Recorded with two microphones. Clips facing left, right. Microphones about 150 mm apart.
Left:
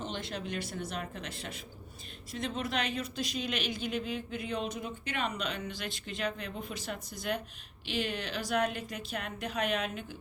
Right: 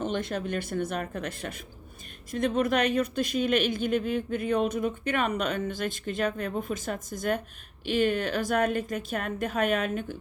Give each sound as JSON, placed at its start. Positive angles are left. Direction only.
{"t": 0.0, "sound": "speech", "side_deg": -50}